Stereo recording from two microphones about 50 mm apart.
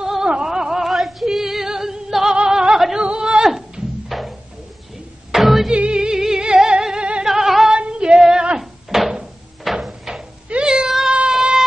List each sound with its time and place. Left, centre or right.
0.0 s a sound: centre
0.5 s female singing: centre
2.3 s music: centre
3.0 s a sound: right
4.1 s music: centre
5.3 s music: centre
5.7 s music: centre
7.2 s music: centre
7.7 s female singing: centre
8.5 s a sound: centre
10.5 s cat: centre